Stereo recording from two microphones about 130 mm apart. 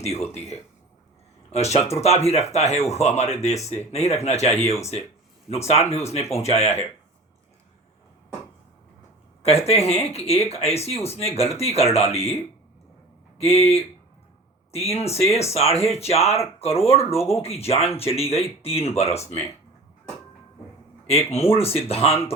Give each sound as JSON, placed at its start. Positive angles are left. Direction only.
{"t": 0.0, "sound": "speech", "side_deg": 55}
{"t": 9.4, "sound": "speech", "side_deg": 50}
{"t": 13.4, "sound": "speech", "side_deg": 50}
{"t": 14.9, "sound": "speech", "side_deg": 50}
{"t": 21.1, "sound": "speech", "side_deg": 50}